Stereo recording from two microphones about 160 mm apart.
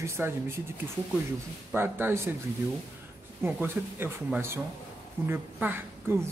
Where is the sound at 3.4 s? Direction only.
15° right (ahead or behind).